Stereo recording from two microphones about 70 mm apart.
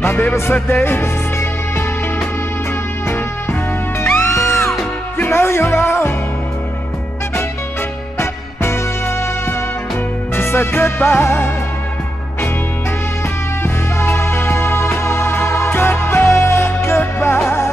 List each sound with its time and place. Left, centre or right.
0.0 s music: left
4.2 s music: left
10.3 s music: left
13.6 s music: left
16.3 s music: left